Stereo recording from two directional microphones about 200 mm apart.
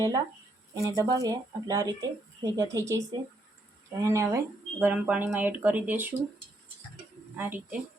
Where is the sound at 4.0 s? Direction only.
15° right (ahead or behind).